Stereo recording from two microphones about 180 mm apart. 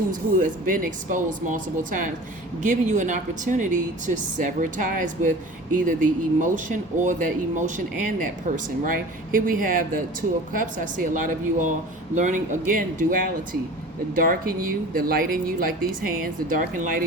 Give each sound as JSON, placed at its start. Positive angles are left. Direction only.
{"t": 0.1, "sound": "speech", "side_deg": -50}
{"t": 7.0, "sound": "speech", "side_deg": -45}